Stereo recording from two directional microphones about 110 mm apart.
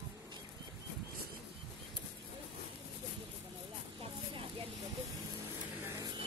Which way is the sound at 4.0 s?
55° right (ahead or behind).